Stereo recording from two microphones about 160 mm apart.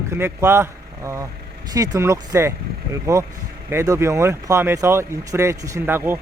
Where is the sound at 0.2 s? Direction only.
15° right (ahead or behind).